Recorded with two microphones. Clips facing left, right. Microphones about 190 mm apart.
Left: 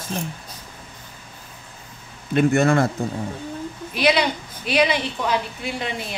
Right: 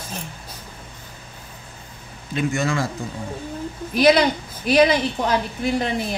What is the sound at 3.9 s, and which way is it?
A woman's voice, 45° right (ahead or behind).